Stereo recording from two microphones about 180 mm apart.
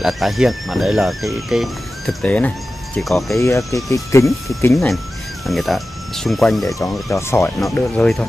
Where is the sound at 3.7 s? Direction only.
Centre (ahead or behind).